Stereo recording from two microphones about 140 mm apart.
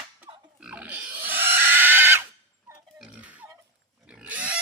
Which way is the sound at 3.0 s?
10° right (ahead or behind).